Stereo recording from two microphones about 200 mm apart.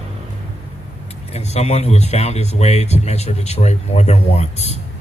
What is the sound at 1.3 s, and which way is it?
A man's voice, 30° left (ahead or behind).